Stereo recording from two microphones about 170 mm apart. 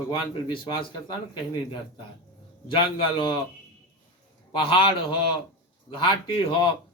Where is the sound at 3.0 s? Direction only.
30° left (ahead or behind).